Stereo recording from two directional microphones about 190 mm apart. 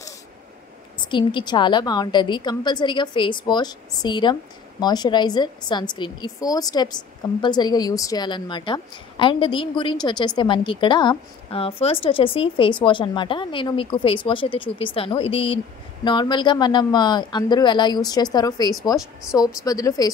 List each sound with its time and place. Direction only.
1.0 s a woman's voice: 25° left (ahead or behind)